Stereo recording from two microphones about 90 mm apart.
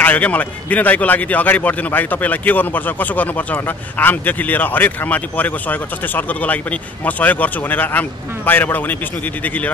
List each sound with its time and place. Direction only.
0.0 s a man's voice: 15° left (ahead or behind)